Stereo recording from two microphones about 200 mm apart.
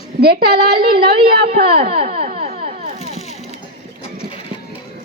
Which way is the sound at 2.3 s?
30° right (ahead or behind).